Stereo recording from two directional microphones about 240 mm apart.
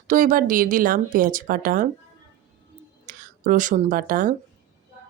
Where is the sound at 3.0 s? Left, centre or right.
Right.